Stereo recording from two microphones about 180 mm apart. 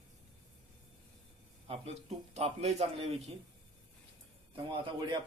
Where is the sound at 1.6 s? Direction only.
35° right (ahead or behind).